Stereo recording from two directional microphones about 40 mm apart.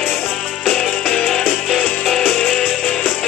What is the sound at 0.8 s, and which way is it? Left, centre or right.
Music, left.